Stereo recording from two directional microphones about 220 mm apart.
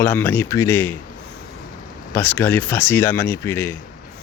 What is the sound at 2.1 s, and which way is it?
Speech, 10° left (ahead or behind).